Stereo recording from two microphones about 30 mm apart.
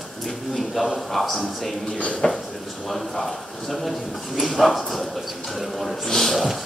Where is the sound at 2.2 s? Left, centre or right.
Left.